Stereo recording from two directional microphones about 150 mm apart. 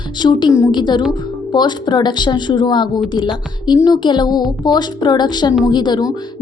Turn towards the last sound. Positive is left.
turn(degrees=25)  # may be behind; listen again after turning